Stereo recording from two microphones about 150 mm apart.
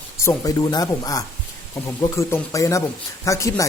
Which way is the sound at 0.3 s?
25° left (ahead or behind).